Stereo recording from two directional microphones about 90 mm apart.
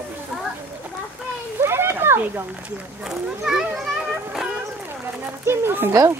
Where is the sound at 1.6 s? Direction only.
30° right (ahead or behind).